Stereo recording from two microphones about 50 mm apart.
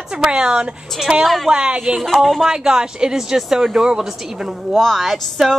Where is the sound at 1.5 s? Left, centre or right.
Centre.